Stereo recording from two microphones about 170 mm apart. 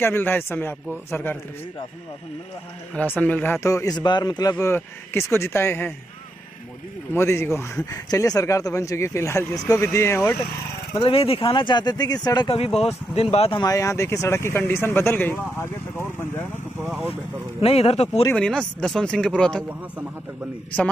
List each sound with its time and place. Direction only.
0.0 s speech: 10° left (ahead or behind)
2.9 s speech: 10° left (ahead or behind)
7.2 s speech: 15° left (ahead or behind)
11.0 s speech: 35° left (ahead or behind)
12.5 s speech: 35° left (ahead or behind)
13.6 s speech: 20° left (ahead or behind)
16.8 s speech: centre (ahead or behind)
17.1 s speech: 35° left (ahead or behind)
18.3 s speech: 5° left (ahead or behind)